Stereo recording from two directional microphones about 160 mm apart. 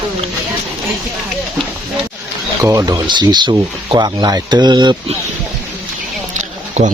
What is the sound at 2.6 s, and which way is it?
Speech, 20° right (ahead or behind).